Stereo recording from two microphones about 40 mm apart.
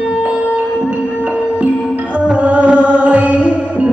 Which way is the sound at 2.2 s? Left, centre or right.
Right.